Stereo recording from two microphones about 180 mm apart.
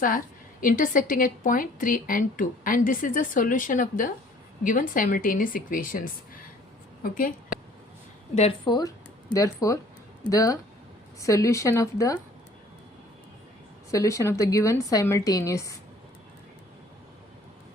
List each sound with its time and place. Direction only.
0.6 s a woman's voice: 50° left (ahead or behind)
7.0 s a woman's voice: 50° left (ahead or behind)
8.4 s a woman's voice: 30° left (ahead or behind)
13.9 s a woman's voice: 15° left (ahead or behind)